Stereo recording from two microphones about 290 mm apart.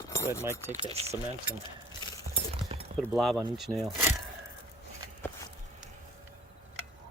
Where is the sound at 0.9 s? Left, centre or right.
Right.